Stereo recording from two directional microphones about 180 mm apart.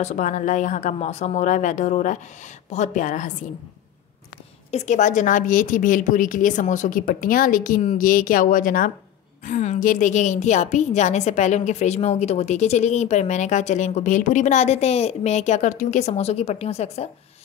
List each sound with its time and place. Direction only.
0.0 s a woman's voice: 40° left (ahead or behind)
4.6 s a woman's voice: 40° left (ahead or behind)